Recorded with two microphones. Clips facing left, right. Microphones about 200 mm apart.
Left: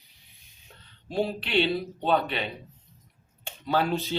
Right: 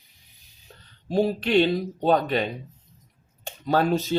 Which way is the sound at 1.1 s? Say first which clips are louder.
Right 6 dB; 45° right (ahead or behind).